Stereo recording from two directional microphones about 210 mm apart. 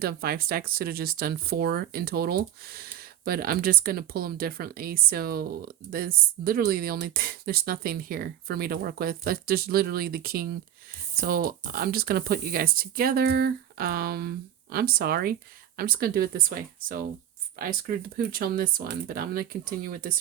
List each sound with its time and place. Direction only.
0.0 s speech: 45° right (ahead or behind)